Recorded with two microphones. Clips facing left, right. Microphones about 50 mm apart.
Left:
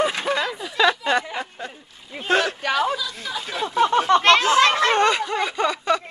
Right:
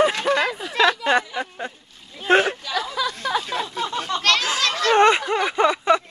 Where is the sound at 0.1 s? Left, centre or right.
Centre.